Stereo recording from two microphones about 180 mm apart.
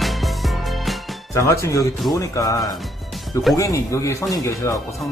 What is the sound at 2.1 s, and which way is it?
Speech, 20° left (ahead or behind).